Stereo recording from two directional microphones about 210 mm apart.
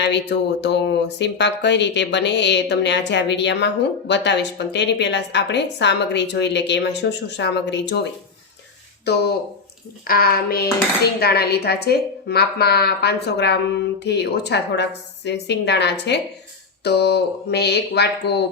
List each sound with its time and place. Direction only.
0.0 s a woman's voice: 55° left (ahead or behind)
10.1 s a woman's voice: 45° left (ahead or behind)